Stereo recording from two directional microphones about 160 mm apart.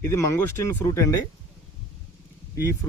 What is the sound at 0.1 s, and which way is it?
Speech, 15° left (ahead or behind).